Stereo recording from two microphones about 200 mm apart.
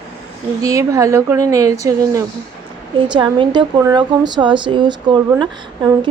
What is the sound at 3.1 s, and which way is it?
A woman's voice, 20° right (ahead or behind).